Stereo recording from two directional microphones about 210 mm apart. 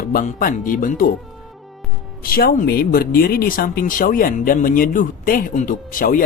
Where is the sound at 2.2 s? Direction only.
45° left (ahead or behind).